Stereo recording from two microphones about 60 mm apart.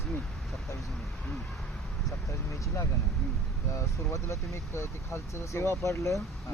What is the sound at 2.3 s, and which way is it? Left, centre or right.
Speech, left.